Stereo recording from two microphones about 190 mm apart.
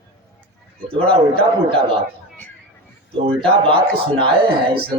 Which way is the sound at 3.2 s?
30° right (ahead or behind).